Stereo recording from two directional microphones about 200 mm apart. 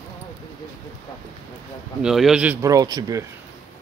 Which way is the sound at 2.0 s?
Centre (ahead or behind).